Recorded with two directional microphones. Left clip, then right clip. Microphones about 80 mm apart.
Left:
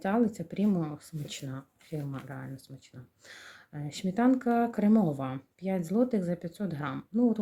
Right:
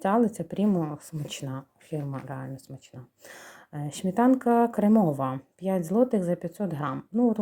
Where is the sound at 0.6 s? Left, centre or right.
Right.